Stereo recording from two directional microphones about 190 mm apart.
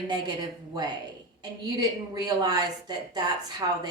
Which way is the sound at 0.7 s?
20° right (ahead or behind).